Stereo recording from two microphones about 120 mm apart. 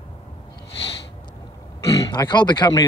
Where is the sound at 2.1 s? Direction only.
40° left (ahead or behind).